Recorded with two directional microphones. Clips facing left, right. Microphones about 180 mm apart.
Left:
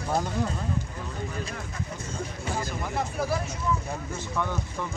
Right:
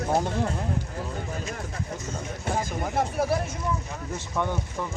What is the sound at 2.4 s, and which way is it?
Speech, 50° right (ahead or behind).